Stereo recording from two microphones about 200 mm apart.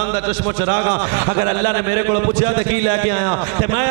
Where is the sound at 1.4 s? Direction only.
15° right (ahead or behind).